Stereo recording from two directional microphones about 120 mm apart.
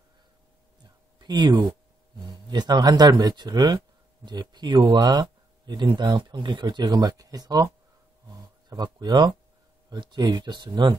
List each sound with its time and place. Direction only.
1.2 s speech: 35° right (ahead or behind)